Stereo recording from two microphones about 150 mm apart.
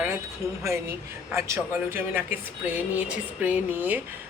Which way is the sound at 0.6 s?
20° right (ahead or behind).